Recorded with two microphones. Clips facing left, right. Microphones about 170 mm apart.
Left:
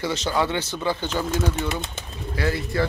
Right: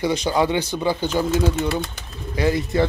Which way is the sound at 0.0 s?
15° right (ahead or behind).